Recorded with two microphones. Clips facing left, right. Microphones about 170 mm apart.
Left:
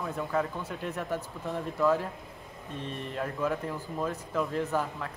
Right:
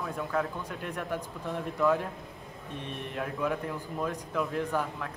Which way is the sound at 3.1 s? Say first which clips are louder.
Even; centre (ahead or behind).